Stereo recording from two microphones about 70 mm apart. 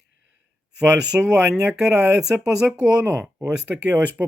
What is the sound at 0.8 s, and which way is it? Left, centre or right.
Speech, centre.